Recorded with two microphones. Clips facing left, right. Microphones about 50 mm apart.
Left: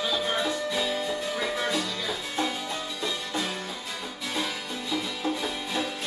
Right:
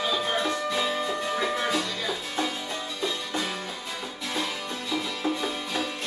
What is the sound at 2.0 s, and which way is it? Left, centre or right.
Music, centre.